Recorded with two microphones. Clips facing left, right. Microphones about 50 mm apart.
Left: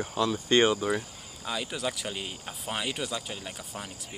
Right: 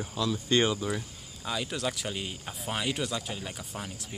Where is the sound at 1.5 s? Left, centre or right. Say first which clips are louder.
Even; centre.